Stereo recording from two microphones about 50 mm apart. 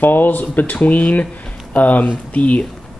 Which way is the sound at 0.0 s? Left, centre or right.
Left.